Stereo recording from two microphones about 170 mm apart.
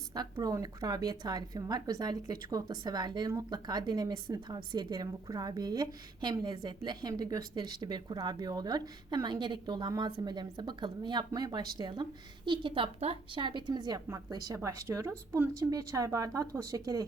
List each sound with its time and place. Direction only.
0.1 s a woman's voice: 25° right (ahead or behind)